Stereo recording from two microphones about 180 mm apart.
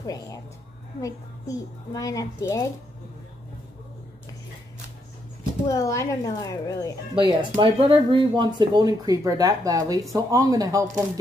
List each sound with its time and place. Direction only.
0.0 s a woman's voice: 20° left (ahead or behind)
5.7 s a woman's voice: 15° left (ahead or behind)
7.2 s speech: 25° right (ahead or behind)